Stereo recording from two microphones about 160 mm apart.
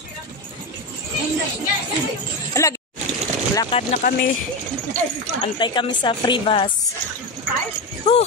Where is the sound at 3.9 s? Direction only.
60° left (ahead or behind).